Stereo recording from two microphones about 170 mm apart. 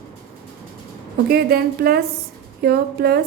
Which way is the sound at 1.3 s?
65° right (ahead or behind).